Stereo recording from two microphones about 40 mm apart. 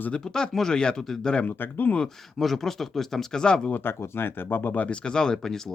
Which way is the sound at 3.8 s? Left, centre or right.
Left.